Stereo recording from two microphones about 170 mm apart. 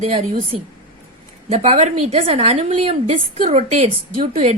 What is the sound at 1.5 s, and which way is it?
A woman's voice, 40° right (ahead or behind).